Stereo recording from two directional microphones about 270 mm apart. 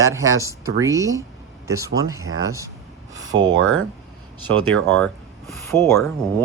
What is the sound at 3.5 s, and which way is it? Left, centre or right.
Speech, right.